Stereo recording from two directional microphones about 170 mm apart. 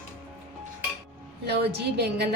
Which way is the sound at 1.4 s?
75° right (ahead or behind).